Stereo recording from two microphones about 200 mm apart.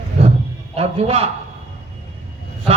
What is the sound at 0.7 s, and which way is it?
Speech, 30° right (ahead or behind).